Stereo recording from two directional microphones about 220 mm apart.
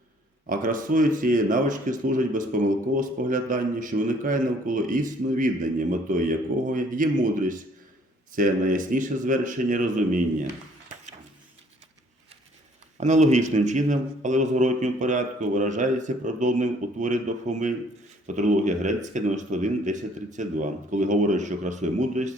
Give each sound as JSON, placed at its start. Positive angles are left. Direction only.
{"t": 0.4, "sound": "speech", "side_deg": -40}
{"t": 13.0, "sound": "speech", "side_deg": -30}